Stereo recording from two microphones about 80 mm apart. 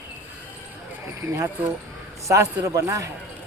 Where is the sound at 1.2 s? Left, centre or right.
Right.